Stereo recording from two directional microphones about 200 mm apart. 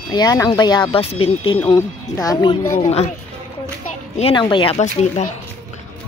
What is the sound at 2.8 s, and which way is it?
Speech, 30° left (ahead or behind).